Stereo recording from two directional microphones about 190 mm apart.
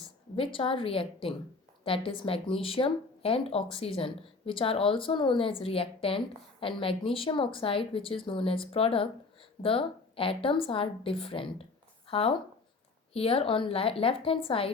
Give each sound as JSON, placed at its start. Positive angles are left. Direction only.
{"t": 0.3, "sound": "speech", "side_deg": 30}